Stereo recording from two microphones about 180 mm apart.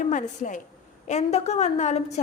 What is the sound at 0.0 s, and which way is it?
A woman's voice, 45° left (ahead or behind).